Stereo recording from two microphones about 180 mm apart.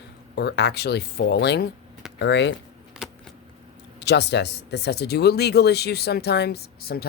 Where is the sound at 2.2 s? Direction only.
75° left (ahead or behind).